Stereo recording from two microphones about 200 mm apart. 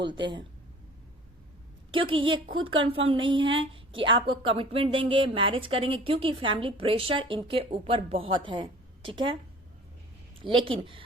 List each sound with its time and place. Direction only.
0.0 s a woman's voice: 25° right (ahead or behind)
1.9 s a woman's voice: 25° right (ahead or behind)
10.4 s a woman's voice: 25° right (ahead or behind)